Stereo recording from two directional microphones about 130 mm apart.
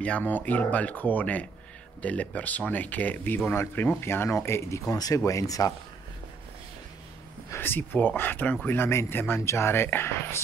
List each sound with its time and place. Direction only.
0.0 s speech: 10° left (ahead or behind)
7.5 s speech: 15° left (ahead or behind)